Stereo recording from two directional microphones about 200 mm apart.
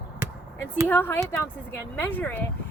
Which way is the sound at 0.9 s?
10° left (ahead or behind).